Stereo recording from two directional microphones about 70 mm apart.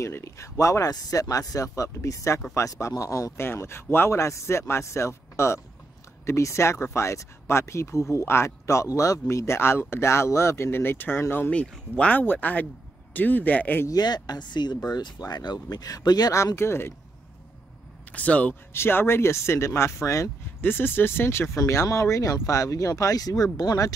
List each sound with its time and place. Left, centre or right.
0.0 s speech: left
3.4 s speech: left
12.0 s speech: left
13.8 s speech: left
16.5 s speech: left
18.1 s speech: left
18.7 s speech: left
20.6 s speech: left